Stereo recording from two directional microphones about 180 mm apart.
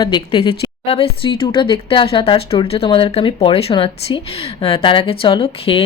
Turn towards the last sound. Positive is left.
turn(degrees=30)  # may be behind; listen again after turning